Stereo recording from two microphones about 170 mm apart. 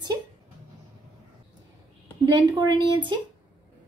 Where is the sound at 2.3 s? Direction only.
25° right (ahead or behind).